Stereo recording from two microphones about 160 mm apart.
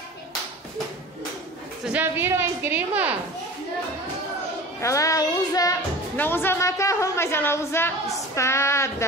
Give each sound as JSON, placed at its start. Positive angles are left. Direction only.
{"t": 1.9, "sound": "a woman's voice", "side_deg": -10}
{"t": 4.7, "sound": "a woman's voice", "side_deg": 20}